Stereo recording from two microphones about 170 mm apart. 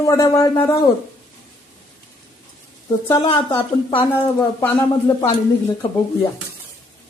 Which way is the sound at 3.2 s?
30° left (ahead or behind).